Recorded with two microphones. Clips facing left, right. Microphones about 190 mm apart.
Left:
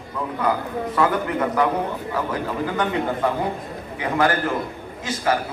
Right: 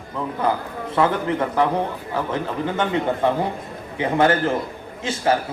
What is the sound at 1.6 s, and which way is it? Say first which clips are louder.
A man's voice: right 1 dB; 30° right (ahead or behind).